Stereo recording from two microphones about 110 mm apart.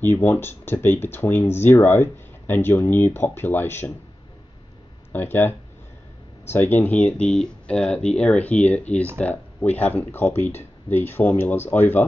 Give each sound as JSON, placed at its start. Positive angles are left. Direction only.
{"t": 0.0, "sound": "speech", "side_deg": 20}
{"t": 5.1, "sound": "speech", "side_deg": 20}